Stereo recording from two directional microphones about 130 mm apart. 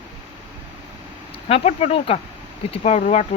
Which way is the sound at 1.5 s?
50° left (ahead or behind).